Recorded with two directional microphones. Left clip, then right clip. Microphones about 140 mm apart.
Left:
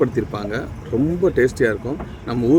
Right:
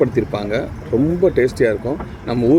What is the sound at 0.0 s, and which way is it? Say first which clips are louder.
Speech: right 3 dB; 5° right (ahead or behind).